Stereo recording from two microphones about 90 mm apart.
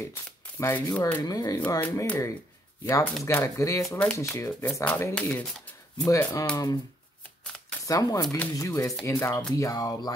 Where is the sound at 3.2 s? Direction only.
35° left (ahead or behind).